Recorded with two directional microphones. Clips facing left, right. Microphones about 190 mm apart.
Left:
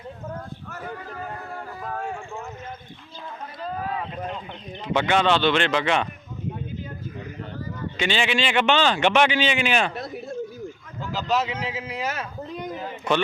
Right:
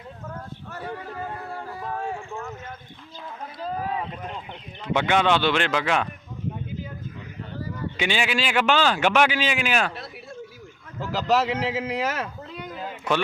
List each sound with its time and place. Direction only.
0.7 s a sound: 30° right (ahead or behind)
4.9 s a man's voice: 10° right (ahead or behind)
7.9 s a man's voice: 10° right (ahead or behind)
9.9 s a sound: 45° left (ahead or behind)
11.3 s speech: 85° right
13.1 s a man's voice: 5° right (ahead or behind)